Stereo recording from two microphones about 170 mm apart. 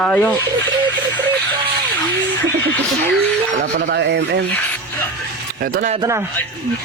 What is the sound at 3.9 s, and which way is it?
Speech, 85° right.